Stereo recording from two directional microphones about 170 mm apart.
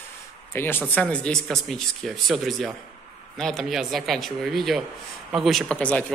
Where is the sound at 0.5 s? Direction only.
15° left (ahead or behind).